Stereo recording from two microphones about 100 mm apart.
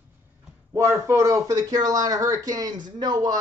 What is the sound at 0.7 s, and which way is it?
Speech, 30° right (ahead or behind).